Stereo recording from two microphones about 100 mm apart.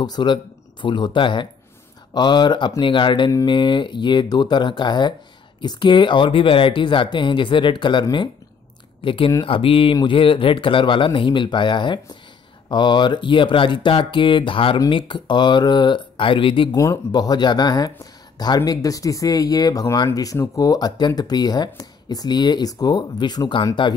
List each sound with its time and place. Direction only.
0.0 s speech: 45° left (ahead or behind)
16.7 s speech: 35° left (ahead or behind)